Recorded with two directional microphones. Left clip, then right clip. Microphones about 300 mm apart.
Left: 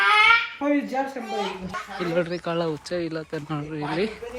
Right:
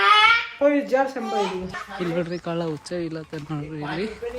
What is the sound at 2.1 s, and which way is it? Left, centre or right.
Speech, centre.